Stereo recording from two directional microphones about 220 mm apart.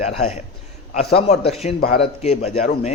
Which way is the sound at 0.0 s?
30° left (ahead or behind).